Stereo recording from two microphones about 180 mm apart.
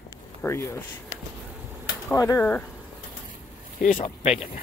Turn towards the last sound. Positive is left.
turn(degrees=30)  # may be behind; listen again after turning